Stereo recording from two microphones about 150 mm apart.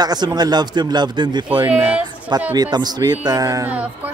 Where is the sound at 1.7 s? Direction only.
10° right (ahead or behind).